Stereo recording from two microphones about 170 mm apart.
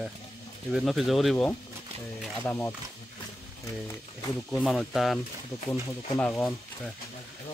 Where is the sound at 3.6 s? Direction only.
20° left (ahead or behind).